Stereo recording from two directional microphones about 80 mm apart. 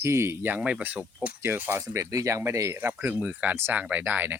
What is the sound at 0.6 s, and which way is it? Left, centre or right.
Speech, centre.